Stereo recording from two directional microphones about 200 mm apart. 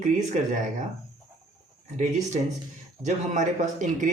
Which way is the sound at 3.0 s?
35° right (ahead or behind).